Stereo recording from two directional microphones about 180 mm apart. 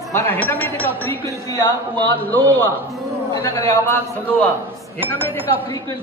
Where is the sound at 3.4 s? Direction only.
20° left (ahead or behind).